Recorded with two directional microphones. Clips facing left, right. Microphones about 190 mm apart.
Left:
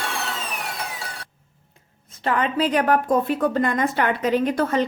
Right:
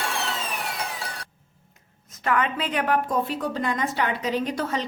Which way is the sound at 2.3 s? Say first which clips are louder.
Left 4 dB; 35° left (ahead or behind).